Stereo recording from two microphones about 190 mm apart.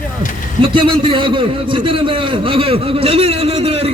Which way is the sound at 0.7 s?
25° right (ahead or behind).